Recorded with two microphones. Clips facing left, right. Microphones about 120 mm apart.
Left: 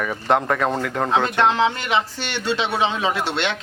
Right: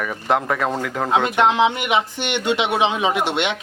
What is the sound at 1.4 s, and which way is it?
A man's voice, 15° right (ahead or behind).